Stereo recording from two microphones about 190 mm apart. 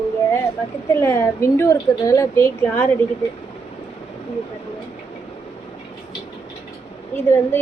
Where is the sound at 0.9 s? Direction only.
15° left (ahead or behind).